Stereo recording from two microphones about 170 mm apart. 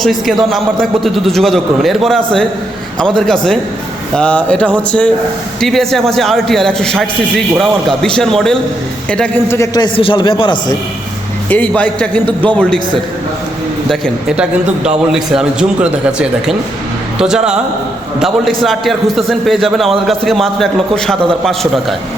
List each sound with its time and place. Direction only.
0.0 s a man's voice: centre (ahead or behind)
9.6 s a man's voice: 25° left (ahead or behind)
11.4 s a man's voice: 10° left (ahead or behind)
13.9 s a man's voice: centre (ahead or behind)